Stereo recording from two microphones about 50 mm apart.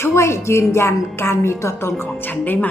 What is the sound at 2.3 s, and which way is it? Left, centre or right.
Speech, left.